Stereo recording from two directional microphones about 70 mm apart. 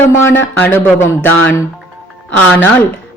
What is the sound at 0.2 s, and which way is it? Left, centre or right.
Speech, left.